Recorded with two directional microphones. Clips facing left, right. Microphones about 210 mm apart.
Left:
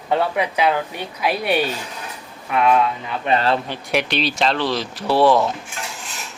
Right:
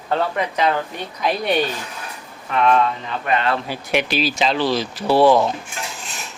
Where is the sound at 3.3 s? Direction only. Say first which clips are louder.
Left 2 dB; 30° left (ahead or behind).